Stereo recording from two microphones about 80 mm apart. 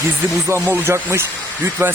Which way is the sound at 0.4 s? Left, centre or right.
Right.